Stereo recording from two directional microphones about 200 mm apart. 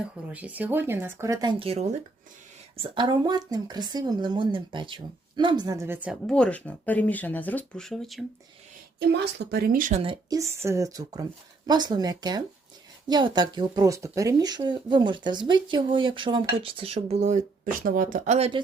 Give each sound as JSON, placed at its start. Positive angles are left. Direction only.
{"t": 0.0, "sound": "a woman's voice", "side_deg": -5}
{"t": 9.0, "sound": "speech", "side_deg": -55}
{"t": 10.0, "sound": "speech", "side_deg": -20}